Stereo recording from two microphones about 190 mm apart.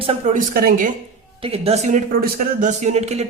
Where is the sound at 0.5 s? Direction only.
50° right (ahead or behind).